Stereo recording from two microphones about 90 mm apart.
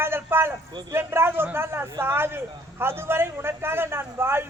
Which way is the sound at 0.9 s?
25° right (ahead or behind).